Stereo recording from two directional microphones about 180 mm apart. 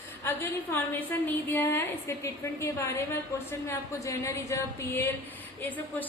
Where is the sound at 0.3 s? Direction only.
10° left (ahead or behind).